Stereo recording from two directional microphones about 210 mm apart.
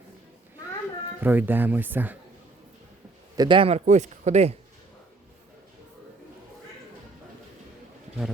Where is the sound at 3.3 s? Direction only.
20° right (ahead or behind).